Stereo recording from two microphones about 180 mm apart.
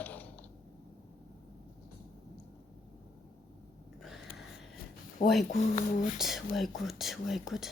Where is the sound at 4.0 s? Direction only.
Centre (ahead or behind).